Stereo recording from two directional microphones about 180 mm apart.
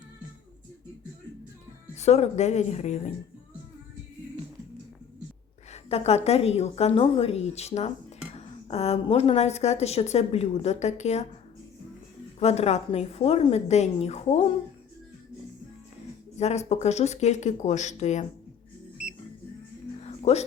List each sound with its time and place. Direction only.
2.0 s speech: 35° left (ahead or behind)
5.7 s speech: 35° left (ahead or behind)
12.4 s speech: 35° left (ahead or behind)
16.4 s speech: 40° left (ahead or behind)
20.1 s a sound: 35° left (ahead or behind)